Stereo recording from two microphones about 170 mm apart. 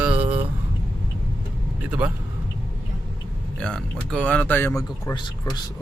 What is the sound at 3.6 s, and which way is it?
Speech, 5° left (ahead or behind).